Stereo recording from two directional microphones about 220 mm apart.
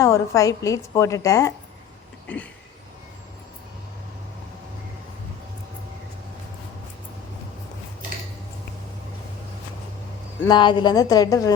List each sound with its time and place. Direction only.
0.0 s a woman's voice: 15° left (ahead or behind)
10.5 s a woman's voice: 20° left (ahead or behind)